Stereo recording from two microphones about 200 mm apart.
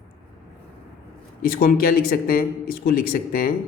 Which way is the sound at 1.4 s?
50° left (ahead or behind).